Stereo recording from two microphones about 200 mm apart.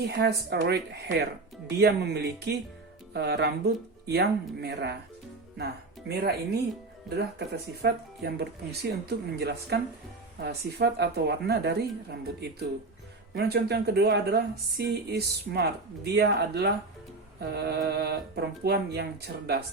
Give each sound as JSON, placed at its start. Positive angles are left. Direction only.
{"t": 0.0, "sound": "speech", "side_deg": -55}
{"t": 6.1, "sound": "speech", "side_deg": -55}
{"t": 13.3, "sound": "speech", "side_deg": -55}